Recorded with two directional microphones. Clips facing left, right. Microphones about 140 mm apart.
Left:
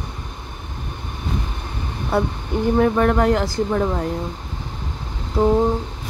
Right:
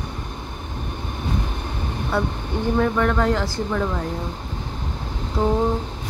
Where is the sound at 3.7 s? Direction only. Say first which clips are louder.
Left 3 dB; 30° left (ahead or behind).